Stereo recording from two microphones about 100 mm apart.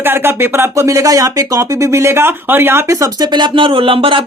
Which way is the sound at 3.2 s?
50° right (ahead or behind).